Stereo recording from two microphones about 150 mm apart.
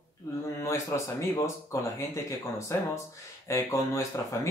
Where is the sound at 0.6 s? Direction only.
20° left (ahead or behind).